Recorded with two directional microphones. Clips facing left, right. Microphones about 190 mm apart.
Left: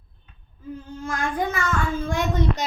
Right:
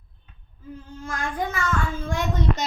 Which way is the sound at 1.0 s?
15° left (ahead or behind).